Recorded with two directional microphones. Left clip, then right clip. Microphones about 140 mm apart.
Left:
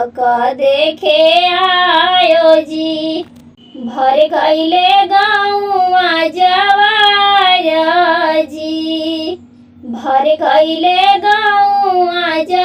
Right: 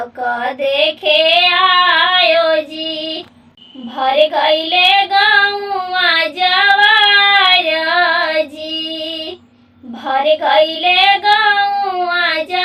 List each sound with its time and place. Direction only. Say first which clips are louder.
0.3 s child singing: left 5 dB; 40° left (ahead or behind)
3.9 s child singing: left 2 dB; 40° left (ahead or behind)
10.1 s child singing: left 2 dB; 40° left (ahead or behind)